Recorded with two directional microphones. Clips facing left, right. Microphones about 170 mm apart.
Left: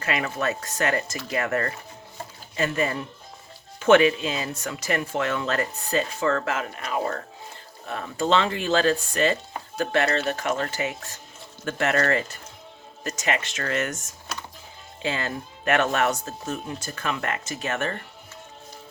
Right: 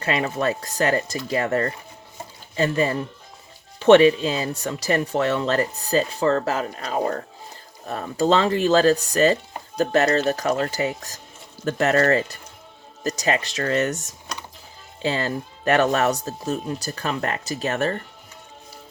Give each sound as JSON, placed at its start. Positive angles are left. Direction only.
{"t": 0.0, "sound": "speech", "side_deg": -30}